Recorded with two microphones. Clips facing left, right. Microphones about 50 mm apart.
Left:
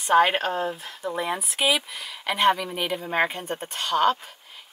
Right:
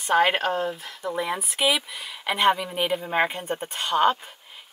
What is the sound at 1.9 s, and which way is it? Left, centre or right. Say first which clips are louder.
Speech: right 1 dB; centre.